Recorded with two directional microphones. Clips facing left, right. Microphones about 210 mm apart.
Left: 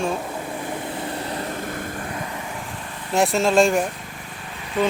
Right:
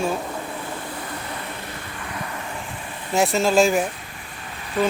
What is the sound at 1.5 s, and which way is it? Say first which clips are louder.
Vehicle: left 6 dB; 50° left (ahead or behind).